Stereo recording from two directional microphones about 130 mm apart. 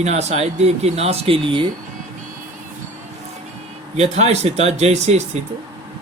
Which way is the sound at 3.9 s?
55° right (ahead or behind).